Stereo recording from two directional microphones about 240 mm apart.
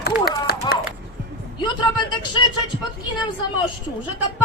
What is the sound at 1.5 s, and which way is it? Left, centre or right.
Speech, centre.